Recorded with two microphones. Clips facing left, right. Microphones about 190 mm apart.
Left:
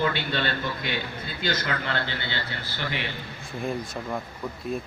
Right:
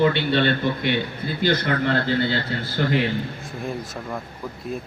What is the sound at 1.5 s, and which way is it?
Speech, 35° right (ahead or behind).